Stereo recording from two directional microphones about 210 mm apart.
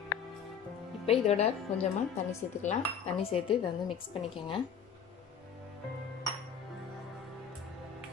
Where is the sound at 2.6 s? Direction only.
30° left (ahead or behind).